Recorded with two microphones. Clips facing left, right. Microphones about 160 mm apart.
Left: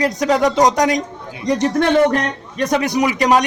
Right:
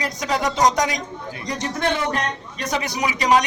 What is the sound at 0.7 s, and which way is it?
A man's voice, 50° left (ahead or behind).